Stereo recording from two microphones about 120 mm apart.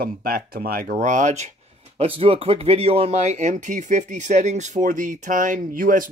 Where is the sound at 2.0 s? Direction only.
55° right (ahead or behind).